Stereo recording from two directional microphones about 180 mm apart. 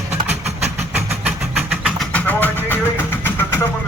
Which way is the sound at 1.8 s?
5° left (ahead or behind).